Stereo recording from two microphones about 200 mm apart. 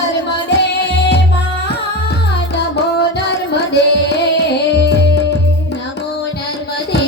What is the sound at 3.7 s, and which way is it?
Carnatic music, 55° left (ahead or behind).